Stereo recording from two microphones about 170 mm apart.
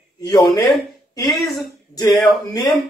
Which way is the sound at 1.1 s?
20° left (ahead or behind).